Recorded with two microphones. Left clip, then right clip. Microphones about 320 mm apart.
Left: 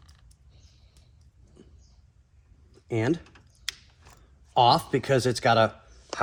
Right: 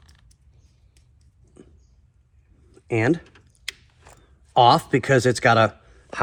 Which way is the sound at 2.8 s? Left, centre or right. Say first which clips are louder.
Right 6 dB; centre.